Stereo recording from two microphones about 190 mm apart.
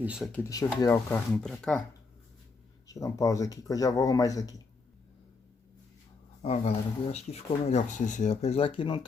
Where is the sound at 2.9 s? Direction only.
15° left (ahead or behind).